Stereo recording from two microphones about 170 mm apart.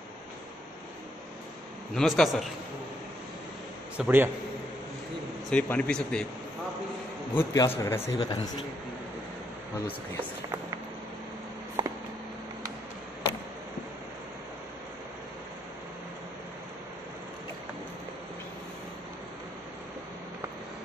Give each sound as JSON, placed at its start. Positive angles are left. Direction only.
{"t": 2.0, "sound": "a man's voice", "side_deg": 0}
{"t": 4.0, "sound": "a man's voice", "side_deg": -15}
{"t": 5.5, "sound": "speech", "side_deg": 10}
{"t": 7.3, "sound": "speech", "side_deg": 15}
{"t": 11.8, "sound": "a sound", "side_deg": -25}